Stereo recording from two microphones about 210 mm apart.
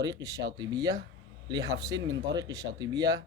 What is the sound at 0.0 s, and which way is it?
Speech, 15° right (ahead or behind).